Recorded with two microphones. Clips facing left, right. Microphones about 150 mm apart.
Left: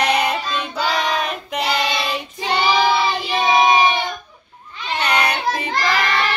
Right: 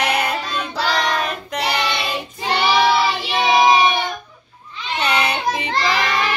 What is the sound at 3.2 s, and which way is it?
Child singing, 75° right (ahead or behind).